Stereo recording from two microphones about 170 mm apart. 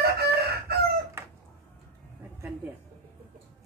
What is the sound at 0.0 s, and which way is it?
Chicken, 70° right (ahead or behind).